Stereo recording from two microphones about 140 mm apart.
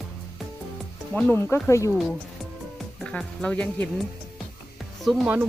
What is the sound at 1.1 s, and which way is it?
Speech, 15° left (ahead or behind).